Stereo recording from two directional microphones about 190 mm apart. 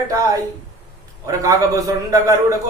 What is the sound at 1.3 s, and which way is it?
A man's voice, 15° right (ahead or behind).